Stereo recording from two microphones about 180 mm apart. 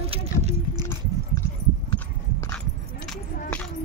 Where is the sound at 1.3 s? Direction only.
20° left (ahead or behind).